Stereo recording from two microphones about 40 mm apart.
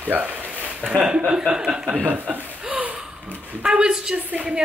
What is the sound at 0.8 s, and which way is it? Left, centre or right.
Speech, right.